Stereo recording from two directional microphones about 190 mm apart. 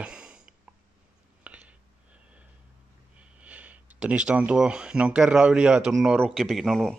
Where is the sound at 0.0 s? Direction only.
5° right (ahead or behind).